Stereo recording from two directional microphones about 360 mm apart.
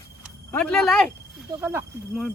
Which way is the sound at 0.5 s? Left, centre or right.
Centre.